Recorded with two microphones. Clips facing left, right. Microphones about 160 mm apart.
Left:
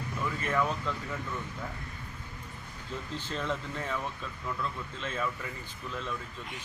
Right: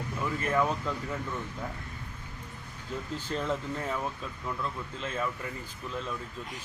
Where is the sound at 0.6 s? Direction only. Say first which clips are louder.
Right 2 dB; 5° right (ahead or behind).